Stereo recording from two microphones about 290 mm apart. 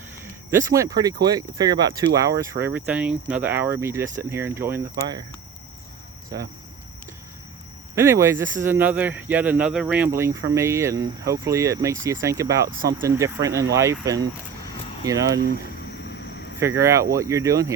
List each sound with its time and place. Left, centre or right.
0.5 s speech: centre
7.9 s speech: centre
12.6 s speech: right
12.9 s speech: centre
16.0 s a sound: left
16.6 s speech: centre